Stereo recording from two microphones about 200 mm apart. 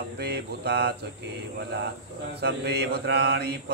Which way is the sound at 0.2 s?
55° right (ahead or behind).